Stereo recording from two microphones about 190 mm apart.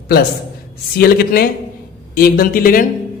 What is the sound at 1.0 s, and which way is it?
A man's voice, 55° left (ahead or behind).